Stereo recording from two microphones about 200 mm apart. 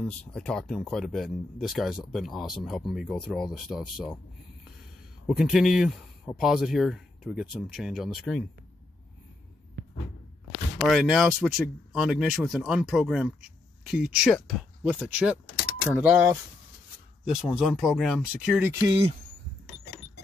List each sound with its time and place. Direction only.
0.0 s speech: 5° left (ahead or behind)
5.2 s speech: centre (ahead or behind)
10.8 s speech: centre (ahead or behind)
17.2 s speech: centre (ahead or behind)
18.9 s speech: 30° right (ahead or behind)